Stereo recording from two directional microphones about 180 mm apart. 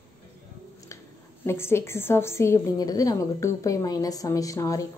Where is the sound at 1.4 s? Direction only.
15° left (ahead or behind).